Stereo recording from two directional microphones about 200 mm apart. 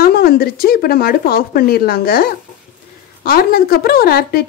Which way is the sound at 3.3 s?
50° left (ahead or behind).